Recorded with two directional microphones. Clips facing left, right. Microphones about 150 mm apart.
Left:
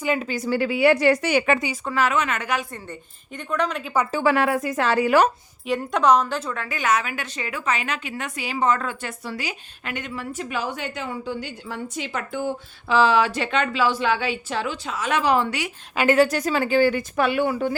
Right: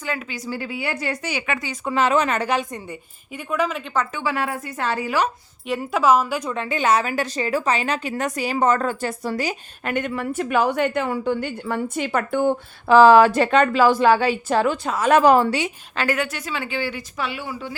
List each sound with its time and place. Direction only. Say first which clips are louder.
0.3 s a woman's voice: left 6 dB; 65° left (ahead or behind)
1.9 s a woman's voice: right 4 dB; 25° right (ahead or behind)
2.7 s a woman's voice: right 3 dB; 10° right (ahead or behind)
4.4 s a woman's voice: left 5 dB; 90° left
5.6 s a woman's voice: even; centre (ahead or behind); by 15.5 s 45° right (ahead or behind)
16.1 s speech: left 8 dB; 40° left (ahead or behind); by 17.7 s 55° left (ahead or behind)